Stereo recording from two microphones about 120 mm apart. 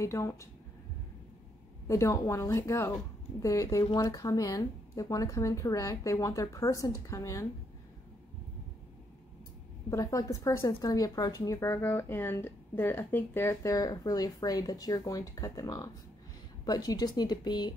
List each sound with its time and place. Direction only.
0.0 s speech: 25° left (ahead or behind)
1.9 s speech: 25° left (ahead or behind)
9.8 s speech: 30° left (ahead or behind)